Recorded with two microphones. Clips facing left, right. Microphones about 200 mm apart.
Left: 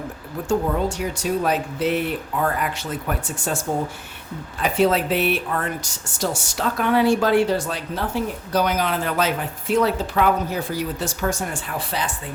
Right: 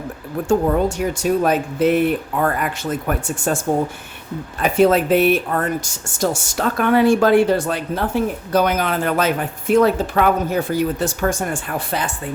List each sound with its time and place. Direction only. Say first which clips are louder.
0.4 s speech: right 5 dB; 50° right (ahead or behind)